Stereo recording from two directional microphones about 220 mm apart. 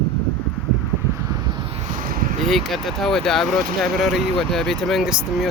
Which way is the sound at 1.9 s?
40° right (ahead or behind).